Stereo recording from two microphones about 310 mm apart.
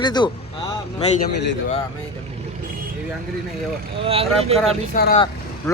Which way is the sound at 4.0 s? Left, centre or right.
Centre.